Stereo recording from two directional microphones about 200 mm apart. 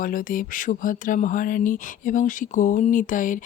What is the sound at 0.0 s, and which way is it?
Speech, 45° left (ahead or behind).